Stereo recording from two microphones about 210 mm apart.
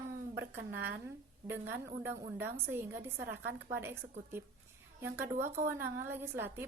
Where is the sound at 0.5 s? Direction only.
50° right (ahead or behind).